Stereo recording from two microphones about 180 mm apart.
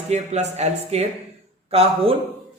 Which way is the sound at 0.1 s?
40° right (ahead or behind).